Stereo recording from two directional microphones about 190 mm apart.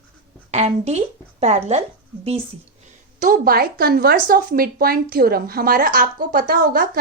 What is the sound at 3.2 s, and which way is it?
Speech, 50° right (ahead or behind).